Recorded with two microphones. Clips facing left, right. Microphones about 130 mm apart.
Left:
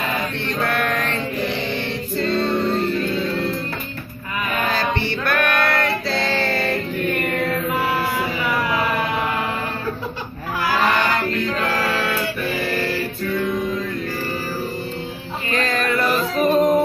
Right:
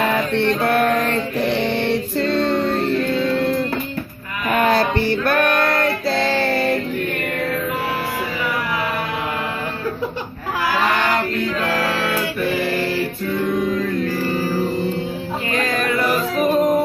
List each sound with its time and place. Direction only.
0.6 s mantra: 35° right (ahead or behind)
1.5 s music: 65° right (ahead or behind)
4.5 s a sound: 55° right (ahead or behind)
5.0 s female singing: 40° right (ahead or behind)
6.3 s child singing: 10° right (ahead or behind)
15.5 s music: 10° right (ahead or behind)